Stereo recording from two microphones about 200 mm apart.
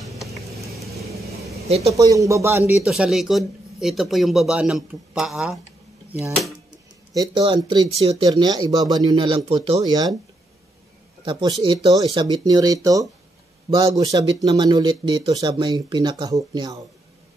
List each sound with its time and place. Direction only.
2.0 s a man's voice: 15° right (ahead or behind)
7.2 s speech: 20° right (ahead or behind)
11.2 s speech: 20° right (ahead or behind)